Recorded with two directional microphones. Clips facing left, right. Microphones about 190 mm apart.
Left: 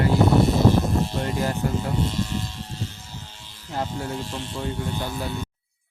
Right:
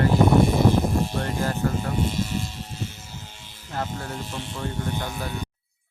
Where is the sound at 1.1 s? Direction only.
15° left (ahead or behind).